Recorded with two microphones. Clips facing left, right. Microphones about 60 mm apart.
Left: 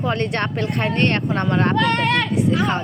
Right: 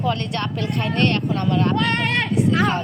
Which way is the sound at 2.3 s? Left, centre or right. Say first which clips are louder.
Even; left.